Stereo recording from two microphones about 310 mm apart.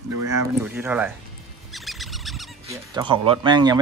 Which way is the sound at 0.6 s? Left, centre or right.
Centre.